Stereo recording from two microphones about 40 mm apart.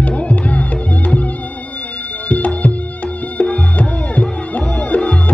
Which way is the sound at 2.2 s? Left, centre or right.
Left.